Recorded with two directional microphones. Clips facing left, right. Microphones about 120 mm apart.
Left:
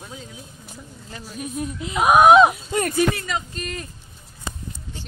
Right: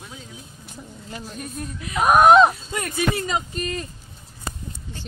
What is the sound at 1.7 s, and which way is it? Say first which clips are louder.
Speech: left 2 dB; 20° left (ahead or behind).